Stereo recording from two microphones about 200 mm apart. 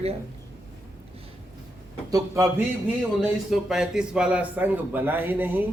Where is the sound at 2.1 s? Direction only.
15° right (ahead or behind).